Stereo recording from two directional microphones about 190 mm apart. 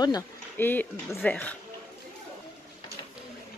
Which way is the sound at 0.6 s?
10° left (ahead or behind).